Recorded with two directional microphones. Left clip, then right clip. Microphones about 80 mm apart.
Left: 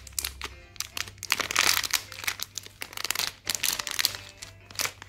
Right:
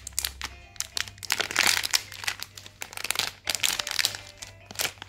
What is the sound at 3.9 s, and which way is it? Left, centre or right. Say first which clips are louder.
Music: right 2 dB; right.